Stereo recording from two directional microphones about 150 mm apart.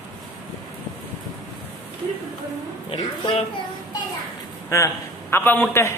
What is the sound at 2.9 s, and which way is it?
Speech, 35° left (ahead or behind).